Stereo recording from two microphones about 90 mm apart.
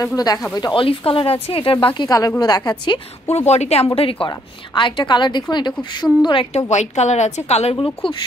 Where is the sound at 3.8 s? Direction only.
90° left.